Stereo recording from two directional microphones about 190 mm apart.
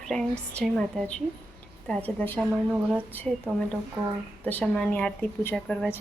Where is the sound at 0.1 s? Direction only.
Centre (ahead or behind).